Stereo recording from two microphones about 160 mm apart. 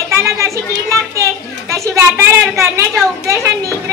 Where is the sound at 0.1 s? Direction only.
20° right (ahead or behind).